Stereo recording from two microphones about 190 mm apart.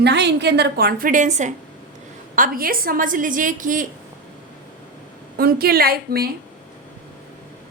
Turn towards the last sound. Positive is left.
turn(degrees=-55)  # may be behind; listen again after turning